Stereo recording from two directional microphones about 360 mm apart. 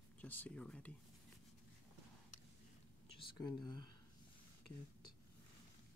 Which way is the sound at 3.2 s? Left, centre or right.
Centre.